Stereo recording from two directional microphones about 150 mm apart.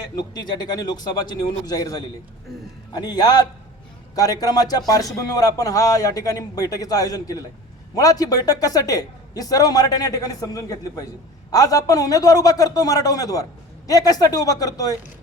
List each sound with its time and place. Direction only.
0.2 s a man's voice: 25° left (ahead or behind)